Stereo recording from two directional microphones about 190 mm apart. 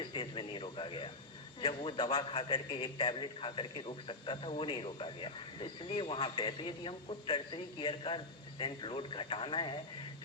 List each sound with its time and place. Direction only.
0.0 s a man's voice: 25° left (ahead or behind)